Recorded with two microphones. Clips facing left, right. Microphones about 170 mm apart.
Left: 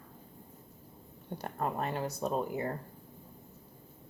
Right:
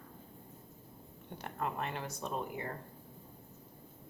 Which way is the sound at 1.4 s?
40° left (ahead or behind).